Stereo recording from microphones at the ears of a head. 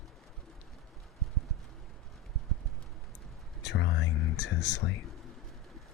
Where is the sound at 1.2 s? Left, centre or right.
Right.